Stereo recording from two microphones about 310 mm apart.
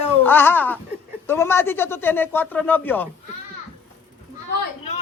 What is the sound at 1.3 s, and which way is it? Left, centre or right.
Speech, centre.